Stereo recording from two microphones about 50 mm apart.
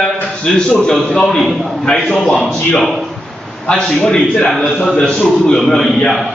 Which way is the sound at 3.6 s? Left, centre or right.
Centre.